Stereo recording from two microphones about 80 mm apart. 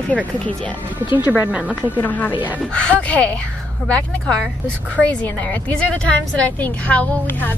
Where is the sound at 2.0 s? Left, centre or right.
Left.